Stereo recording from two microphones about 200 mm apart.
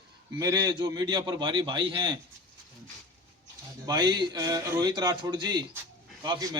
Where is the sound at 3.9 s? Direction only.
20° right (ahead or behind).